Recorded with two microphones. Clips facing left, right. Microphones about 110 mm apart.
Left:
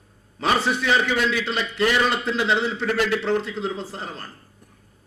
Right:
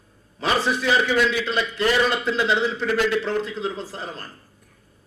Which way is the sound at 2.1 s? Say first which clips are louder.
Even; 35° left (ahead or behind).